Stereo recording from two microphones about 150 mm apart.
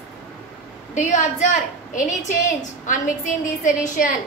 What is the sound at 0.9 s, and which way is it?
A woman's voice, 55° left (ahead or behind).